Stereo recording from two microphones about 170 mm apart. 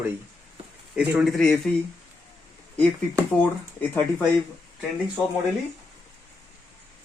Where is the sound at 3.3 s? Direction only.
5° left (ahead or behind).